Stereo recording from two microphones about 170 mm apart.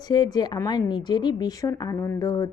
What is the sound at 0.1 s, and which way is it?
A woman's voice, 25° left (ahead or behind).